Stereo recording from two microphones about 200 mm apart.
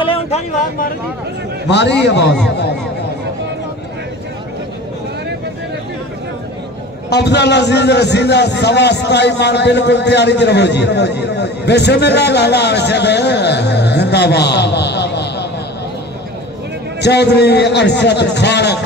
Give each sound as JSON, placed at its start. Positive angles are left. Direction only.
{"t": 0.0, "sound": "vehicle", "side_deg": 25}
{"t": 1.7, "sound": "a man's voice", "side_deg": 60}
{"t": 7.1, "sound": "a man's voice", "side_deg": 55}
{"t": 17.0, "sound": "a man's voice", "side_deg": 55}